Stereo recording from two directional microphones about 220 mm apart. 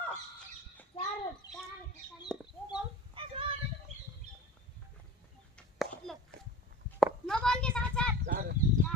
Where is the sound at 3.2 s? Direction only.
25° right (ahead or behind).